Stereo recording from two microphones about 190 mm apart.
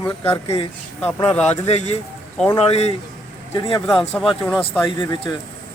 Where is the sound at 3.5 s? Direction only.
20° left (ahead or behind).